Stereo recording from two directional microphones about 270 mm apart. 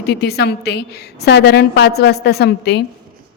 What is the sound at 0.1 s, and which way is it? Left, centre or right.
A woman's voice, left.